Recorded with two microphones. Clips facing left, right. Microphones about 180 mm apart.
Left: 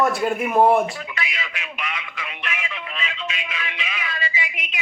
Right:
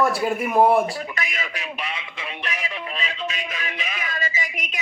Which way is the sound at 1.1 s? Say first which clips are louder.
Right 1 dB; 45° right (ahead or behind).